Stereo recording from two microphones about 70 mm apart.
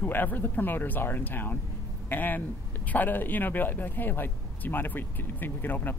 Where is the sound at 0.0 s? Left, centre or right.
Left.